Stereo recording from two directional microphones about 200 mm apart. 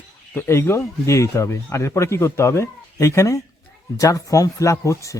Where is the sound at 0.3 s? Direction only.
10° left (ahead or behind).